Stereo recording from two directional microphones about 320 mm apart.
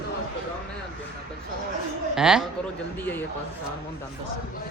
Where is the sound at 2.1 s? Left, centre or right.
Centre.